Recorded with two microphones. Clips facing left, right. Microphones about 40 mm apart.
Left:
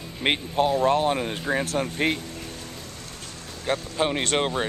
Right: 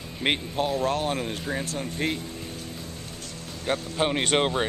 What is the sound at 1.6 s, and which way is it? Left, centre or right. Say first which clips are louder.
Speech: left 6 dB; left.